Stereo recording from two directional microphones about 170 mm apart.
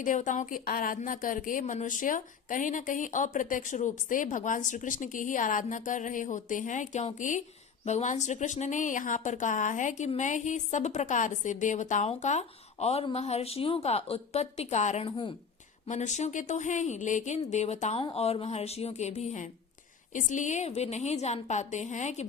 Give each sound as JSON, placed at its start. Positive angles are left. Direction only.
{"t": 0.0, "sound": "a woman's voice", "side_deg": 50}
{"t": 15.9, "sound": "a woman's voice", "side_deg": 45}